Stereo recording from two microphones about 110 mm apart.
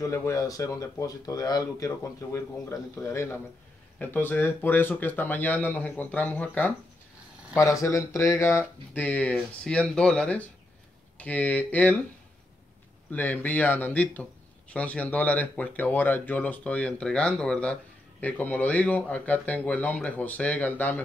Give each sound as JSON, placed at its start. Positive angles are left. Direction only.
{"t": 0.0, "sound": "speech", "side_deg": 30}
{"t": 7.8, "sound": "speech", "side_deg": 30}
{"t": 13.1, "sound": "speech", "side_deg": 15}